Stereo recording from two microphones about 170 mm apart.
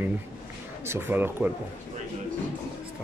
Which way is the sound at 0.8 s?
15° right (ahead or behind).